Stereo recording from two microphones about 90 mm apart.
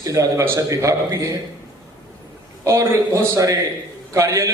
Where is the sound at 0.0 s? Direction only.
40° right (ahead or behind).